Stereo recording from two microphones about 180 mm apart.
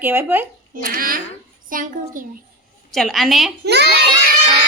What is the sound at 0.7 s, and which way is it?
A child's voice, 50° right (ahead or behind).